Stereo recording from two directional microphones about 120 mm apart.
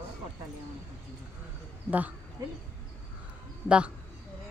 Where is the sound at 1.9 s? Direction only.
15° right (ahead or behind).